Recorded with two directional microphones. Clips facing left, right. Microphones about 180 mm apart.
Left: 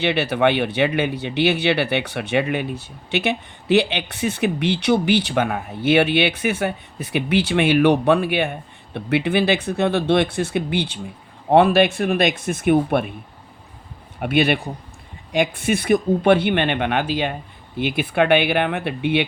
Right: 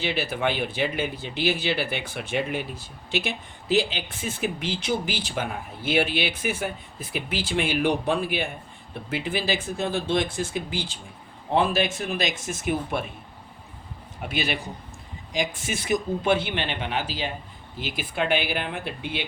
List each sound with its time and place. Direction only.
0.0 s speech: 70° left (ahead or behind)
14.2 s speech: 60° left (ahead or behind)